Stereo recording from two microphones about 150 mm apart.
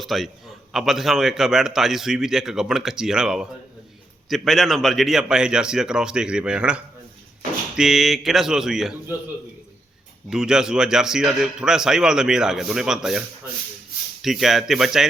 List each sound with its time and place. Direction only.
0.0 s speech: centre (ahead or behind)
10.2 s speech: 5° right (ahead or behind)